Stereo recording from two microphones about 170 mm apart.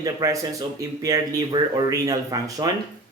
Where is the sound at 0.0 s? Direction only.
20° right (ahead or behind).